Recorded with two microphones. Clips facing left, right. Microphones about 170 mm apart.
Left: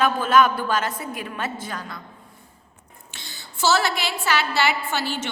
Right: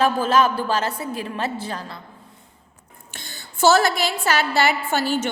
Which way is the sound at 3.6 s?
45° right (ahead or behind).